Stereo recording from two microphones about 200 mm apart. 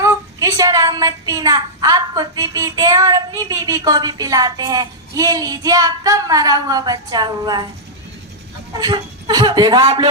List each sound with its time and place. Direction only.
0.0 s a woman's voice: 15° right (ahead or behind)
8.8 s speech: 20° right (ahead or behind)